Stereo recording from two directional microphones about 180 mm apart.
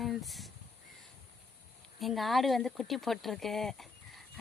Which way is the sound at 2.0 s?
Centre (ahead or behind).